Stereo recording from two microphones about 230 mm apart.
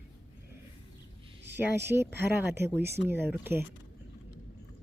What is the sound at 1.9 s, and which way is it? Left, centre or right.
Speech, centre.